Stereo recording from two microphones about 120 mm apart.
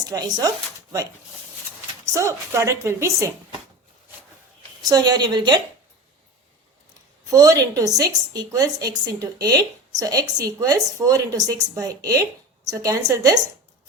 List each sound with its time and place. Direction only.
0.0 s a woman's voice: 35° right (ahead or behind)
2.0 s a woman's voice: 25° right (ahead or behind)
4.8 s a woman's voice: 35° right (ahead or behind)
7.3 s a woman's voice: 30° right (ahead or behind)